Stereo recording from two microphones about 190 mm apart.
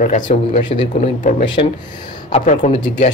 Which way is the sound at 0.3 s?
30° left (ahead or behind).